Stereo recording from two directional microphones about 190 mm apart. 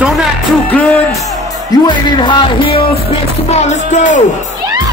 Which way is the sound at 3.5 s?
35° left (ahead or behind).